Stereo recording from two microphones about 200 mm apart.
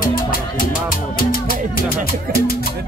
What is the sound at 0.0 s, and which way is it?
Music, 45° left (ahead or behind).